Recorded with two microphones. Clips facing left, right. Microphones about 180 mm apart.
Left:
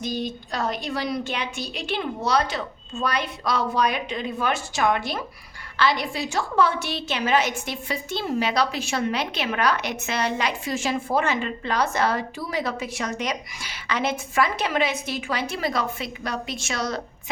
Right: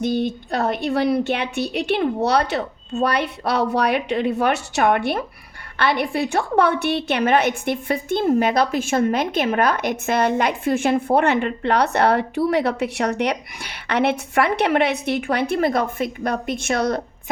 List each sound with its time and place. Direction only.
0.0 s a woman's voice: 60° right (ahead or behind)